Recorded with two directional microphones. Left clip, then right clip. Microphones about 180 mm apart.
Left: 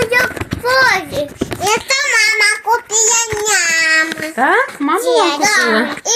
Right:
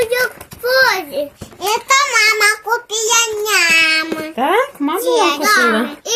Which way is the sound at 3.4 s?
40° right (ahead or behind).